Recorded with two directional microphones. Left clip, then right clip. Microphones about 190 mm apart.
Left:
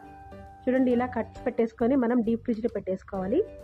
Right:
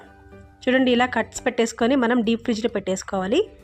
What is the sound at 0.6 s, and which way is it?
Speech, 30° right (ahead or behind).